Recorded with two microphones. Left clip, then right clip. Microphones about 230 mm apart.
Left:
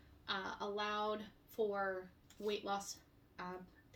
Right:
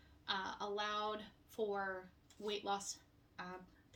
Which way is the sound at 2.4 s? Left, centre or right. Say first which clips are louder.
Left 1 dB; centre.